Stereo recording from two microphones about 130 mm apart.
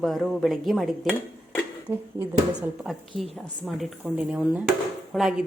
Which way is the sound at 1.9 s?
20° right (ahead or behind).